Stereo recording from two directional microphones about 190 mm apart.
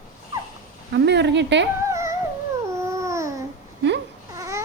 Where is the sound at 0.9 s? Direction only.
65° right (ahead or behind).